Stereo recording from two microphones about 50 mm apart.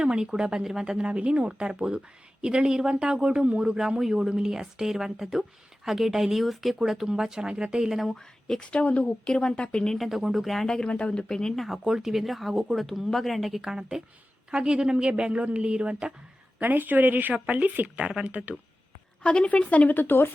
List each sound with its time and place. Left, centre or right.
0.0 s speech: centre
8.1 s speech: centre
8.7 s speech: left
9.9 s speech: centre
10.7 s speech: centre
11.5 s speech: centre; by 16.1 s right
16.6 s speech: right
19.2 s speech: left
19.9 s speech: left